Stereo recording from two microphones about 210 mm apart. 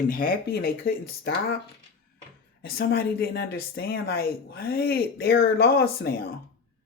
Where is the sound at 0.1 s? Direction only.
40° left (ahead or behind).